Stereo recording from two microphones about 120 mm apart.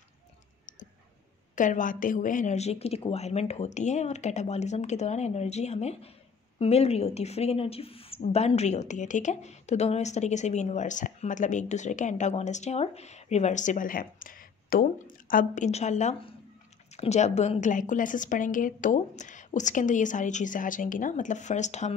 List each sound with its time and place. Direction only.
1.5 s a woman's voice: 90° left
15.5 s a woman's voice: 75° left (ahead or behind)